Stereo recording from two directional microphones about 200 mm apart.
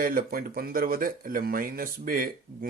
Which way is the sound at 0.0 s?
45° right (ahead or behind).